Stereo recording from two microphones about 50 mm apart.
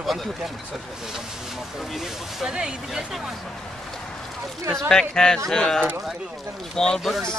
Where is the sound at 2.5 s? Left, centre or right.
Centre.